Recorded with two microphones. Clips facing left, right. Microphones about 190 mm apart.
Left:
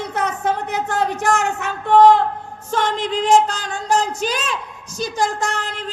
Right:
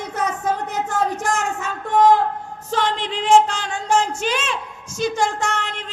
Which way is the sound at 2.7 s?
45° left (ahead or behind).